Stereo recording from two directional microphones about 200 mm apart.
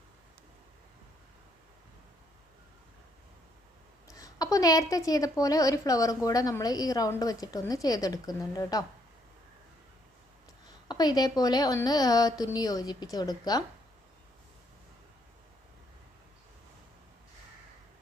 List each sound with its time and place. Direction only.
4.1 s a woman's voice: 15° left (ahead or behind)
10.8 s a woman's voice: 20° left (ahead or behind)